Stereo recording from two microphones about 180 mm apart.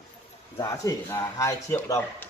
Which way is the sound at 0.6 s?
15° left (ahead or behind).